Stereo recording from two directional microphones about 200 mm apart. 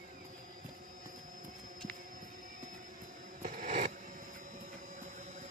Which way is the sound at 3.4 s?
40° right (ahead or behind).